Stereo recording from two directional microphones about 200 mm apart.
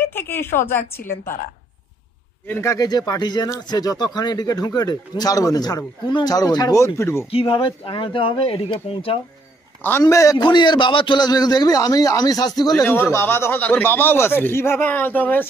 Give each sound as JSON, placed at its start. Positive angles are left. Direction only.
{"t": 0.0, "sound": "speech", "side_deg": 10}
{"t": 2.4, "sound": "speech", "side_deg": 10}
{"t": 7.2, "sound": "speech", "side_deg": 25}
{"t": 9.8, "sound": "a man's voice", "side_deg": 15}